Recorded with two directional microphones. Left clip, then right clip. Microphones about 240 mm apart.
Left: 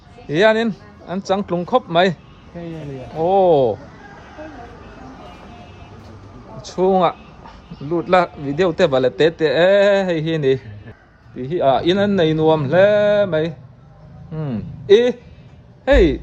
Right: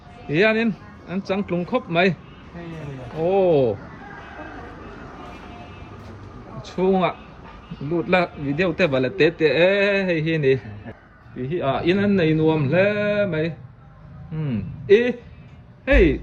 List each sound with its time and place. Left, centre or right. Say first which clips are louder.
0.3 s a man's voice: left 4 dB; centre
3.2 s speech: left 4 dB; left
3.4 s a man's voice: left 4 dB; centre
6.8 s a man's voice: left 4 dB; centre
8.0 s a man's voice: left 5 dB; centre